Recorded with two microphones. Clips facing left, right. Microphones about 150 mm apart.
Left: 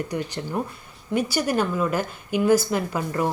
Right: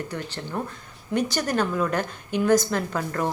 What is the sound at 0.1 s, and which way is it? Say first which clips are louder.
A woman's voice: left 4 dB; 15° left (ahead or behind).